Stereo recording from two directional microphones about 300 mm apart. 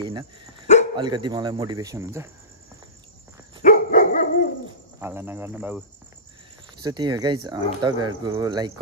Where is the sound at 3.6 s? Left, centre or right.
Left.